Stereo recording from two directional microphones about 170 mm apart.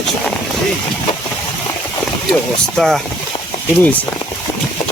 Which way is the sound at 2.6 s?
Centre (ahead or behind).